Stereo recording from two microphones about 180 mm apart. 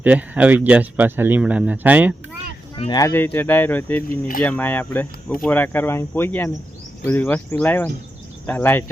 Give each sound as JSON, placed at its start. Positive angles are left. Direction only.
{"t": 0.0, "sound": "speech", "side_deg": -10}
{"t": 2.7, "sound": "speech", "side_deg": 25}
{"t": 3.1, "sound": "speech", "side_deg": 10}
{"t": 4.1, "sound": "speech", "side_deg": 50}
{"t": 4.4, "sound": "speech", "side_deg": 10}